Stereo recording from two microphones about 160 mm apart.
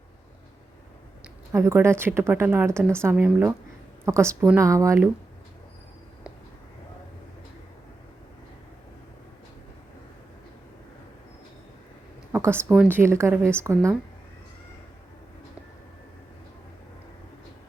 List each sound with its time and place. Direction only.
1.5 s speech: 15° right (ahead or behind)
12.3 s speech: 15° right (ahead or behind)